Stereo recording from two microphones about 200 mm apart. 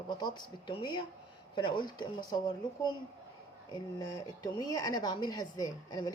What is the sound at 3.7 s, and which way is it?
Speech, 20° left (ahead or behind).